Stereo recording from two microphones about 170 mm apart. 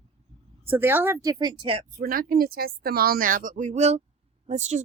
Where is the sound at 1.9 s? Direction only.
55° right (ahead or behind).